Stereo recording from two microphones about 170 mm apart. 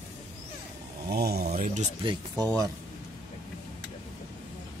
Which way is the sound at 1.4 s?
50° right (ahead or behind).